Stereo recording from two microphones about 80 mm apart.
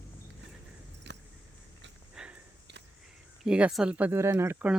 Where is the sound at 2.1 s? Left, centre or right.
Centre.